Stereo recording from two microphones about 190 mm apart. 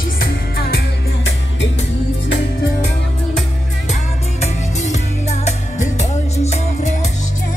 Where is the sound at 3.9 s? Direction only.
40° left (ahead or behind).